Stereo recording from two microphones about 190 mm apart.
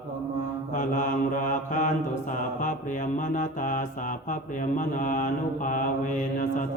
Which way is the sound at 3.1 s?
40° left (ahead or behind).